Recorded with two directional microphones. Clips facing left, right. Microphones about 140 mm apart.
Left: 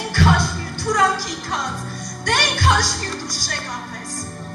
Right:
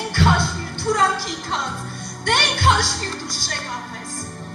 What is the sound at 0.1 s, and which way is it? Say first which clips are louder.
Music: left 1 dB; 25° right (ahead or behind).